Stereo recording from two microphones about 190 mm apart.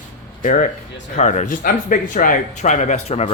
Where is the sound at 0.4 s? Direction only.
40° left (ahead or behind).